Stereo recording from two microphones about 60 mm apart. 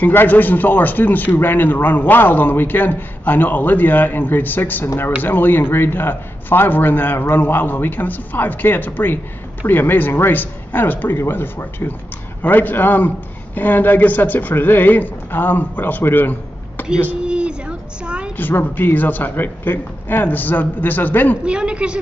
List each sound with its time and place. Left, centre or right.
0.0 s a man's voice: left
17.2 s child singing: centre
18.3 s a man's voice: left
21.5 s a woman's voice: centre